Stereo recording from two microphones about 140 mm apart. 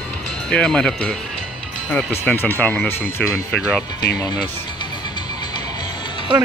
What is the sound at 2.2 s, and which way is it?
Speech, 15° left (ahead or behind).